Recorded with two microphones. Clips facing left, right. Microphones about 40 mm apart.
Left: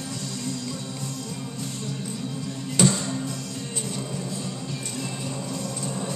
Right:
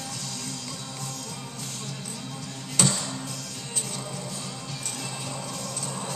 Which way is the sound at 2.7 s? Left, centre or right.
Left.